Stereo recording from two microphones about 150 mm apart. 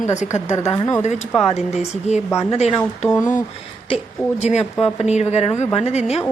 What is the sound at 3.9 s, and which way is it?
A woman's voice, 50° left (ahead or behind).